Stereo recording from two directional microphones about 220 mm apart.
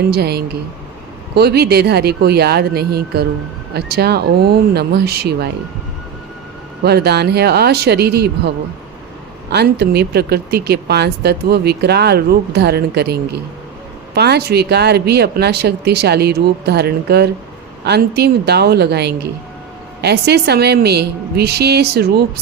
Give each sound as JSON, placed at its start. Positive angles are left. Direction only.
{"t": 0.1, "sound": "speech", "side_deg": -45}
{"t": 6.8, "sound": "speech", "side_deg": -45}
{"t": 9.5, "sound": "speech", "side_deg": -50}